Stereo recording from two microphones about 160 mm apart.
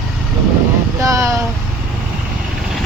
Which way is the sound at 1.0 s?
20° right (ahead or behind).